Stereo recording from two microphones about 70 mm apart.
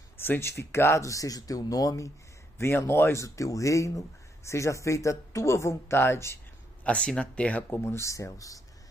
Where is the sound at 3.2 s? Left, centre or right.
Left.